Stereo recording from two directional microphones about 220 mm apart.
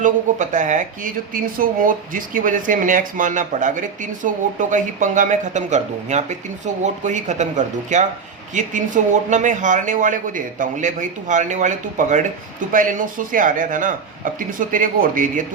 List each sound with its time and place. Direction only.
0.0 s speech: 35° right (ahead or behind)